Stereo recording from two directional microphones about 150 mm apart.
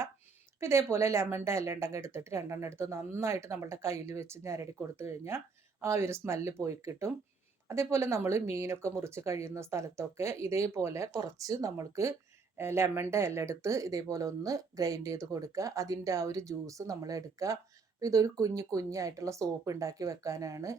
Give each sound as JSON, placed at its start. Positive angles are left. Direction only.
{"t": 0.6, "sound": "speech", "side_deg": -20}